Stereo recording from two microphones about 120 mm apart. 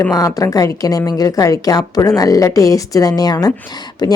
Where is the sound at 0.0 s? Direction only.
30° left (ahead or behind).